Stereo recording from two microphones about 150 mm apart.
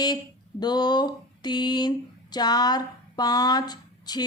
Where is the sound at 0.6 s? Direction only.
30° left (ahead or behind).